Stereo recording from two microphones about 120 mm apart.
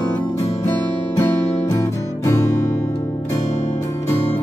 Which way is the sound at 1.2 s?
30° left (ahead or behind).